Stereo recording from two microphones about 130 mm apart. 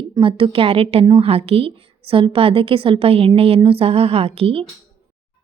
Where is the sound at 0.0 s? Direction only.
40° right (ahead or behind).